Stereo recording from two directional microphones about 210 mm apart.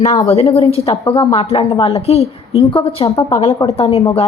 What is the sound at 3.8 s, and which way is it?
Speech, 25° left (ahead or behind).